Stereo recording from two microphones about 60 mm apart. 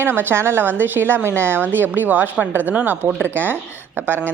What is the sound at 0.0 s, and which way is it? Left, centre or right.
A woman's voice, right.